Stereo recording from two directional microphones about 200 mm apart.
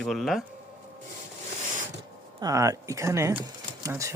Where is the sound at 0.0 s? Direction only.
Centre (ahead or behind).